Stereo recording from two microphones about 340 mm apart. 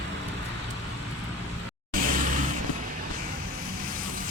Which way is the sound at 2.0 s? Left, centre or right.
Right.